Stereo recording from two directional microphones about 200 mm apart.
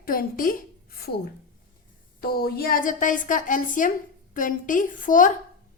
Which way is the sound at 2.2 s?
50° left (ahead or behind).